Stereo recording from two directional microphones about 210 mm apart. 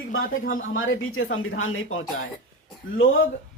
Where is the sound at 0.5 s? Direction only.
70° left (ahead or behind).